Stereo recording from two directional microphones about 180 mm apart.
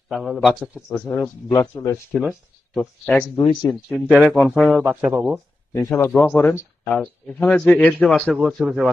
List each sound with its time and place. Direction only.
0.1 s a man's voice: centre (ahead or behind); by 2.0 s 15° left (ahead or behind)
2.1 s speech: centre (ahead or behind)
3.3 s speech: 25° left (ahead or behind)
3.9 s a man's voice: 5° left (ahead or behind)
5.7 s a man's voice: 15° left (ahead or behind); by 8.9 s centre (ahead or behind)